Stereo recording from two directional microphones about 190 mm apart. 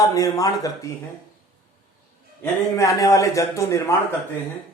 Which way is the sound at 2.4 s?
15° left (ahead or behind).